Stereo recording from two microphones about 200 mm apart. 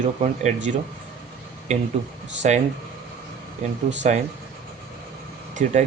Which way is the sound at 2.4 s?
35° right (ahead or behind).